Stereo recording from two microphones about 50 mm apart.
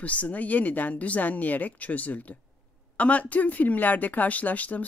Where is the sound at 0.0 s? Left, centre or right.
Left.